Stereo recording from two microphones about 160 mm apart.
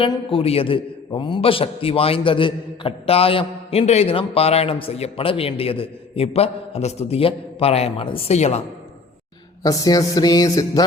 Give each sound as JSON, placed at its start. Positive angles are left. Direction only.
{"t": 0.0, "sound": "a man's voice", "side_deg": 35}
{"t": 9.6, "sound": "music", "side_deg": 20}